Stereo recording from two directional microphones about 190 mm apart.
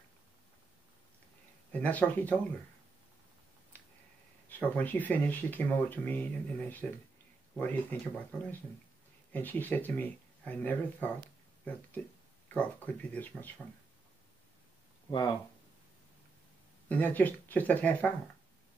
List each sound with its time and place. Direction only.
1.7 s speech: 10° left (ahead or behind)
4.5 s speech: 10° left (ahead or behind)
9.3 s speech: 10° left (ahead or behind)
12.5 s speech: 10° left (ahead or behind)
15.0 s speech: 20° left (ahead or behind)
16.9 s speech: 10° left (ahead or behind)